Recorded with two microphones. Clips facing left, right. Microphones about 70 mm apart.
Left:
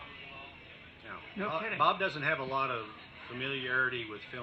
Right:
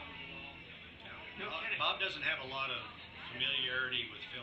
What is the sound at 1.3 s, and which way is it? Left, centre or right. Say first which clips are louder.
Speech: left 9 dB; left.